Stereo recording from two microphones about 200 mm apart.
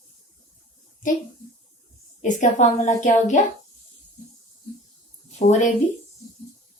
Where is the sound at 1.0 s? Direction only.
40° left (ahead or behind).